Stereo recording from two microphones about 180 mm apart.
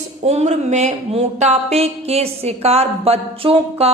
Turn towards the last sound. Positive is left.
turn(degrees=-35)  # may be behind; listen again after turning